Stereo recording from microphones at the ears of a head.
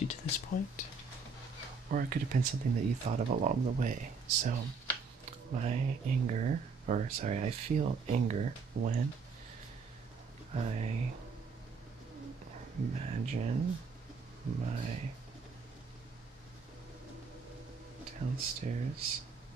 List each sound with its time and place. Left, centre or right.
0.0 s speech: left
1.9 s speech: right
10.5 s speech: right
12.5 s speech: right
18.0 s speech: right